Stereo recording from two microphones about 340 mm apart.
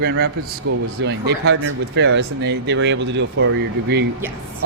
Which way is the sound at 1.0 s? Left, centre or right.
Right.